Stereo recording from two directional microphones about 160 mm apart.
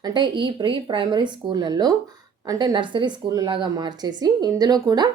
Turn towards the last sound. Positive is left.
turn(degrees=-25)  # may be behind; listen again after turning